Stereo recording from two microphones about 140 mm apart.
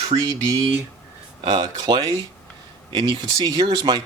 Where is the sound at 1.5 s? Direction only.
30° right (ahead or behind).